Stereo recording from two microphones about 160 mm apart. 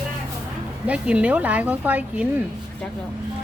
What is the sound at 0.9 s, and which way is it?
Speech, 10° right (ahead or behind).